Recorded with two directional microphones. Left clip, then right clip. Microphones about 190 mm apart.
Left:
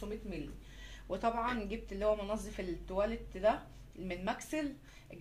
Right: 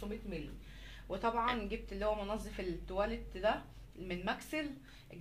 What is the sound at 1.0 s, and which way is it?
A woman's voice, 40° left (ahead or behind).